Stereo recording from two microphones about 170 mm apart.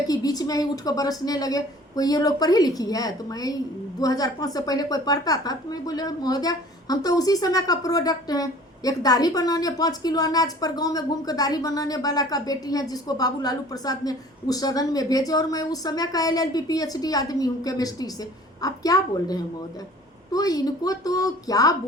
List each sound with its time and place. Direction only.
0.1 s a woman's voice: 20° left (ahead or behind)